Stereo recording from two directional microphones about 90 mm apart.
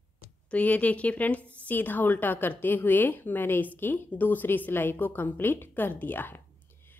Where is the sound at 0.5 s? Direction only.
15° left (ahead or behind).